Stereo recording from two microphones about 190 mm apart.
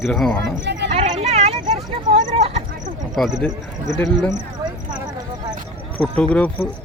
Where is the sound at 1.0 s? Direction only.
35° right (ahead or behind).